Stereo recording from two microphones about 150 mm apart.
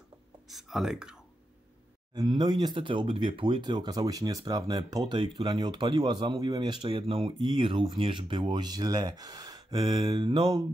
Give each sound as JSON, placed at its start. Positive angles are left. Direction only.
{"t": 0.5, "sound": "speech", "side_deg": 0}
{"t": 2.1, "sound": "speech", "side_deg": -30}